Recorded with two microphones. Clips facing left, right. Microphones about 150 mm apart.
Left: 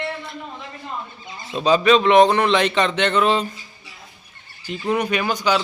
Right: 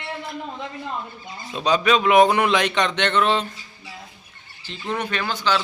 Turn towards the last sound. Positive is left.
turn(degrees=15)  # may be behind; listen again after turning